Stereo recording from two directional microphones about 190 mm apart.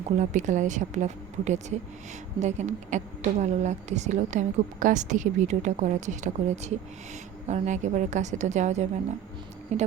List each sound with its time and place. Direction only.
0.2 s speech: 40° right (ahead or behind)